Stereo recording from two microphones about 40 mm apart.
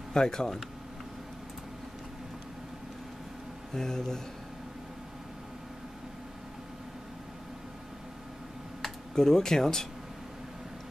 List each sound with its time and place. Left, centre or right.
0.1 s speech: centre
3.7 s speech: centre
8.8 s speech: centre